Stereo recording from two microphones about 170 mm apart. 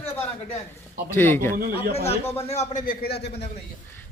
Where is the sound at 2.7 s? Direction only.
50° left (ahead or behind); by 3.5 s 70° left (ahead or behind).